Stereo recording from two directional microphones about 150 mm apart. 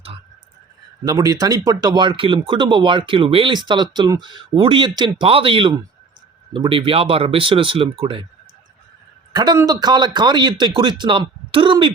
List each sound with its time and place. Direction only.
1.0 s a man's voice: 20° right (ahead or behind)
9.3 s a man's voice: 30° right (ahead or behind)